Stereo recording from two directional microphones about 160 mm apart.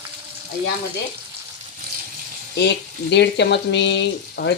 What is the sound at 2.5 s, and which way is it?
Speech, 90° left.